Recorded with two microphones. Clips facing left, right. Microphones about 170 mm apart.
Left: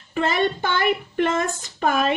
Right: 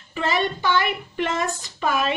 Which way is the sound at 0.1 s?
50° left (ahead or behind).